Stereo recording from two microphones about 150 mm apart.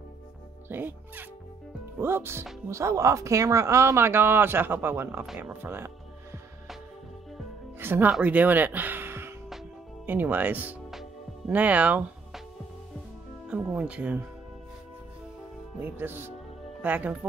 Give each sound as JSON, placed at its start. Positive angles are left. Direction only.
{"t": 0.7, "sound": "speech", "side_deg": -15}
{"t": 7.8, "sound": "speech", "side_deg": -15}
{"t": 13.5, "sound": "speech", "side_deg": -10}
{"t": 15.8, "sound": "speech", "side_deg": -15}